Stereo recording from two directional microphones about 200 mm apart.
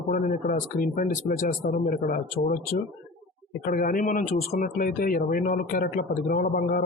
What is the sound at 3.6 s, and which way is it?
Speech, 45° left (ahead or behind).